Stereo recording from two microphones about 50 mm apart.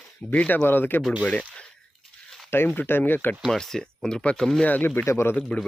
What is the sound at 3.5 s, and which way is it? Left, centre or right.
Speech, centre.